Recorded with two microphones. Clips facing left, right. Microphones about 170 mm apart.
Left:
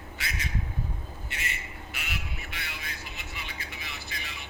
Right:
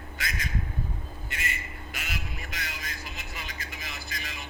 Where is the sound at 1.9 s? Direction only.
40° right (ahead or behind).